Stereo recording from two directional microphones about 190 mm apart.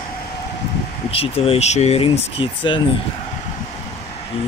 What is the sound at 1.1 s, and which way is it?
Speech, 30° left (ahead or behind).